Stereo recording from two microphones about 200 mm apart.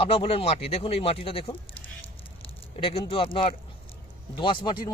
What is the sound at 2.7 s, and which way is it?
Speech, 30° left (ahead or behind).